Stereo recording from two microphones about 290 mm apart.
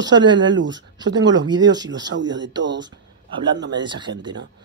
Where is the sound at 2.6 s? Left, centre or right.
Right.